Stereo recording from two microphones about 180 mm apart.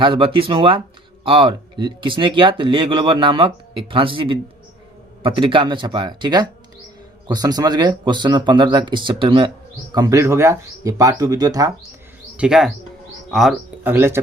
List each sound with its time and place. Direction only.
0.0 s speech: 30° right (ahead or behind)
12.4 s speech: 5° right (ahead or behind)
13.8 s speech: 10° right (ahead or behind)